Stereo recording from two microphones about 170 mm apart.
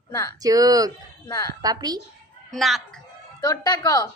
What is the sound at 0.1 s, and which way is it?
Speech, 20° left (ahead or behind).